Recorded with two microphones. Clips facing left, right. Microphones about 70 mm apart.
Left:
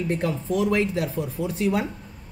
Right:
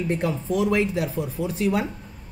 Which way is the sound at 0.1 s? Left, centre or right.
Centre.